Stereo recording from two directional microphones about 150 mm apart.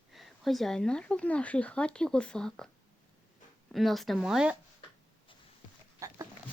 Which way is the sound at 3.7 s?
Centre (ahead or behind).